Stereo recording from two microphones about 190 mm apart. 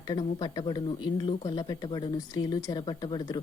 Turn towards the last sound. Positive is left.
turn(degrees=25)  # may be behind; listen again after turning